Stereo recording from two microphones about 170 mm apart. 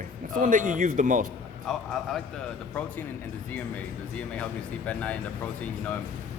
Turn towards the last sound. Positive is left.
turn(degrees=10)  # may be behind; listen again after turning